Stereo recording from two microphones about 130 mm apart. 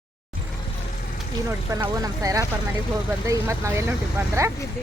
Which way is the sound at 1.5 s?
25° right (ahead or behind).